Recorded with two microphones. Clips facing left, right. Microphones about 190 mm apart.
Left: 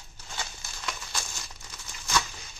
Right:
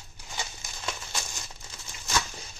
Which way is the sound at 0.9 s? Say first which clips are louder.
Right 1 dB; 25° right (ahead or behind).